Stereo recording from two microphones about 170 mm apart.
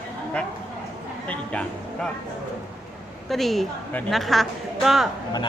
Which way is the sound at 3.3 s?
Centre (ahead or behind).